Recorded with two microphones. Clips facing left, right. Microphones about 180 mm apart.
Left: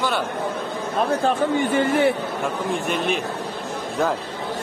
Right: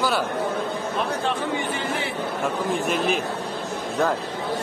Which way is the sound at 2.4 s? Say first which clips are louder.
Right 1 dB; centre (ahead or behind).